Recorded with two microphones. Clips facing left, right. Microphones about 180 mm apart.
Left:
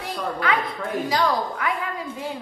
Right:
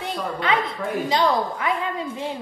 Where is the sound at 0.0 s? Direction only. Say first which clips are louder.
Even; 25° right (ahead or behind).